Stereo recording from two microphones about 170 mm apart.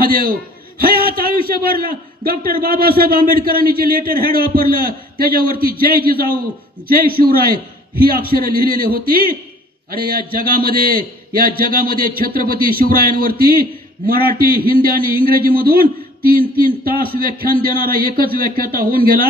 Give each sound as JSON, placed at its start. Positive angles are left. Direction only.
{"t": 0.0, "sound": "a man's voice", "side_deg": -60}